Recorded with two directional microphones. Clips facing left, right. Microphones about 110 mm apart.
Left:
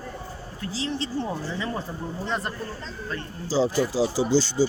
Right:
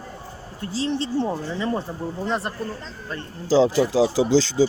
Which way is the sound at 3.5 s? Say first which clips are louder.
Right 5 dB; 90° right.